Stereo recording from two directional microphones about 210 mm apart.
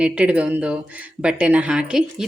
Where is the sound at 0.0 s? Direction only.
5° right (ahead or behind).